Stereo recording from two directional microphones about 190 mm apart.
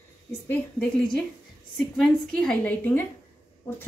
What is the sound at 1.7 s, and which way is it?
A woman's voice, centre (ahead or behind).